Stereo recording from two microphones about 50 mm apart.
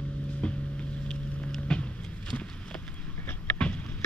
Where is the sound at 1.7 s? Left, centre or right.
Left.